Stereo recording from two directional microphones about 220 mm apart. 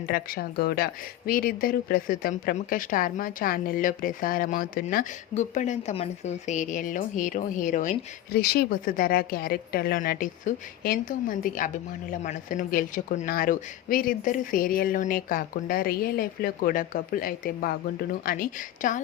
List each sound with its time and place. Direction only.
0.1 s a woman's voice: 45° left (ahead or behind)